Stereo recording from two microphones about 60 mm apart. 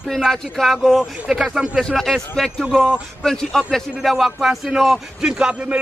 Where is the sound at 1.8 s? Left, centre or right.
Centre.